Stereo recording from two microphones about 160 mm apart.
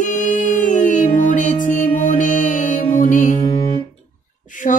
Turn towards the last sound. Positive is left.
turn(degrees=55)  # may be behind; listen again after turning